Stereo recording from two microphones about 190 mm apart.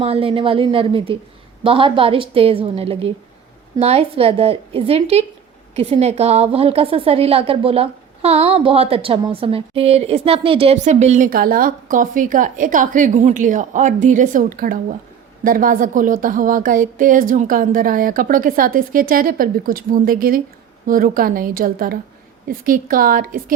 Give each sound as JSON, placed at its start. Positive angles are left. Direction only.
{"t": 0.0, "sound": "a woman's voice", "side_deg": -30}